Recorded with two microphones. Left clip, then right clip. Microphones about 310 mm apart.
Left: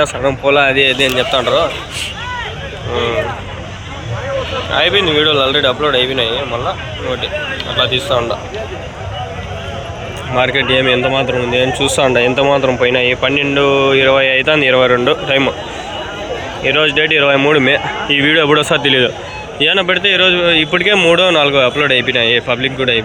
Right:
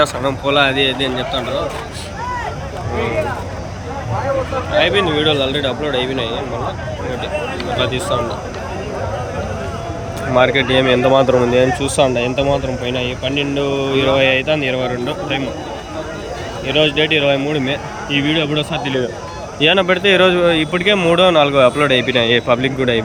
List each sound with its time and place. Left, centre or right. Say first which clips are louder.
0.0 s speech: left 3 dB; centre
4.7 s speech: left 3 dB; centre
7.8 s speech: left 6 dB; centre
10.3 s speech: even; centre
15.0 s speech: left 8 dB; centre
16.6 s speech: left 3 dB; centre